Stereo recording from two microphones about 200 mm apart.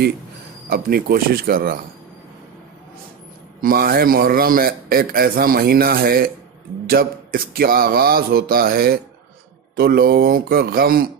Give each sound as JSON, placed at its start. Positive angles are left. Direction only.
{"t": 0.7, "sound": "a man's voice", "side_deg": -50}
{"t": 3.6, "sound": "a man's voice", "side_deg": -50}